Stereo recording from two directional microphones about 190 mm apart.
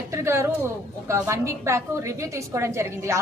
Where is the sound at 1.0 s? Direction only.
15° right (ahead or behind).